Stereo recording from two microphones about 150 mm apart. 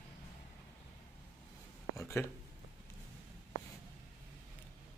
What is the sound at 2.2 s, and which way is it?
Speech, 20° left (ahead or behind).